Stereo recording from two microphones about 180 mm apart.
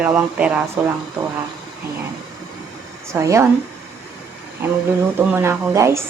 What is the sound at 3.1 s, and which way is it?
Speech, 15° right (ahead or behind).